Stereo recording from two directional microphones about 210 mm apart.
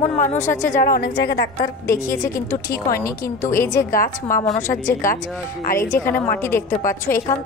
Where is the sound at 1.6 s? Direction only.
15° left (ahead or behind).